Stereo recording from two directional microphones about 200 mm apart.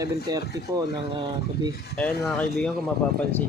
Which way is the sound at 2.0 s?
5° left (ahead or behind).